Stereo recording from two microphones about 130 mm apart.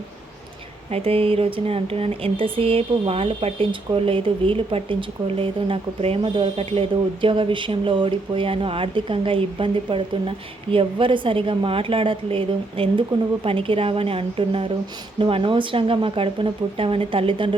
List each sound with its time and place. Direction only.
0.9 s speech: 50° right (ahead or behind)